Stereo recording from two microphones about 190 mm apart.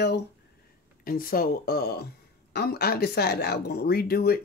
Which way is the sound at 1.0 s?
50° left (ahead or behind).